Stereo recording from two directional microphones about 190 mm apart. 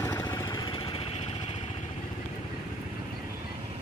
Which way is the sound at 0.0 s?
15° left (ahead or behind).